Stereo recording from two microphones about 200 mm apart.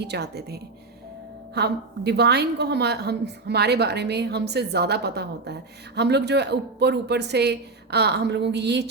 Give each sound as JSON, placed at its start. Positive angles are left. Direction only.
{"t": 0.0, "sound": "a woman's voice", "side_deg": -55}